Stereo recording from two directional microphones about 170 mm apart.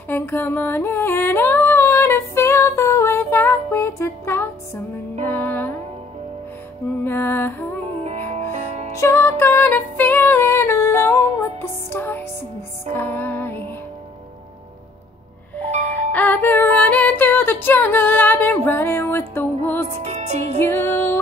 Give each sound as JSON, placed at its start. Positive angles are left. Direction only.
{"t": 0.1, "sound": "a sound", "side_deg": 10}
{"t": 5.2, "sound": "music", "side_deg": 10}
{"t": 7.1, "sound": "music", "side_deg": 10}
{"t": 8.0, "sound": "music", "side_deg": -40}
{"t": 8.9, "sound": "music", "side_deg": 15}
{"t": 15.9, "sound": "music", "side_deg": 10}
{"t": 20.1, "sound": "music", "side_deg": -45}
{"t": 20.5, "sound": "music", "side_deg": 15}